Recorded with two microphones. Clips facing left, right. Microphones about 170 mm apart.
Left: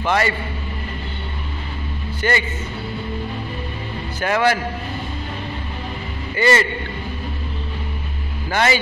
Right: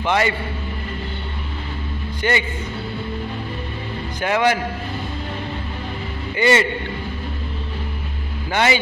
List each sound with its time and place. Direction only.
0.0 s a man's voice: 15° right (ahead or behind)
2.2 s a man's voice: 15° right (ahead or behind)
4.2 s a man's voice: 15° right (ahead or behind)
6.3 s a man's voice: 15° right (ahead or behind)
8.5 s a man's voice: 15° right (ahead or behind)